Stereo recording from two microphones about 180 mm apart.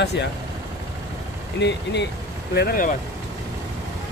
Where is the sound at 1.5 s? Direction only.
75° left (ahead or behind).